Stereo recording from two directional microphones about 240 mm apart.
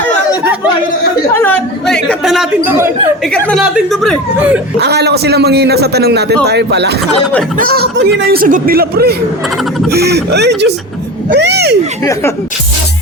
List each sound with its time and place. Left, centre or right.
1.3 s chatter: centre
3.3 s speech: centre
4.8 s a man's voice: right